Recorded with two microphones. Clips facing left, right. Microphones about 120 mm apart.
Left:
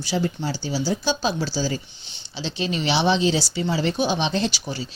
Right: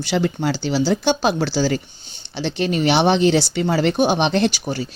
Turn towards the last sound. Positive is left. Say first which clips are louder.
# right 6 dB
turn(degrees=-50)  # may be behind; listen again after turning